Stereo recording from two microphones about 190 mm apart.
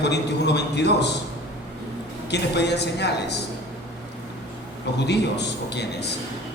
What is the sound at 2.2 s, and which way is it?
A man's voice, 60° left (ahead or behind).